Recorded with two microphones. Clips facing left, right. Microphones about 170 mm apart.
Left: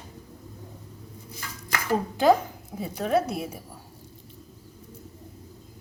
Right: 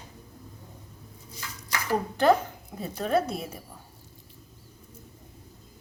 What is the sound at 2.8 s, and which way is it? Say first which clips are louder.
Speech: left 1 dB; 5° left (ahead or behind).